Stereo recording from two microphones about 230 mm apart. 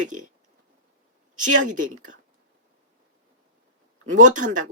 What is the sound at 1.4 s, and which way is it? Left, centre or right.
Speech, right.